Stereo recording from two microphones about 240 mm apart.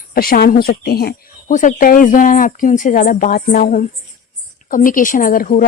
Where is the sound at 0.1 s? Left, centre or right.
Left.